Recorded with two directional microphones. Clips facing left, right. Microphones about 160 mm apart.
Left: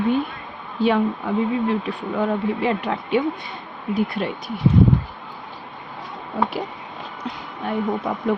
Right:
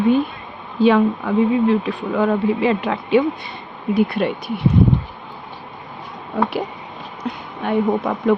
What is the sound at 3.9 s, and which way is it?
Speech, 65° right (ahead or behind).